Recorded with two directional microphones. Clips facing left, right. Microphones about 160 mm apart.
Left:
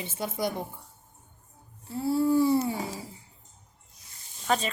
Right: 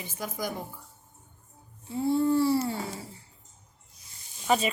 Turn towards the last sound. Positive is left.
turn(degrees=-10)  # may be behind; listen again after turning